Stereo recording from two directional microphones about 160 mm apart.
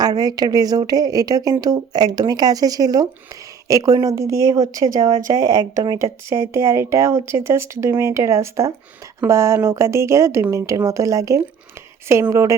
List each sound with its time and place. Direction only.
0.0 s speech: 25° right (ahead or behind)